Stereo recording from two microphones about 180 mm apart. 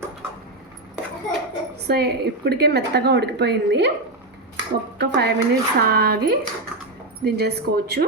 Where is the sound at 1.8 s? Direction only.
65° right (ahead or behind).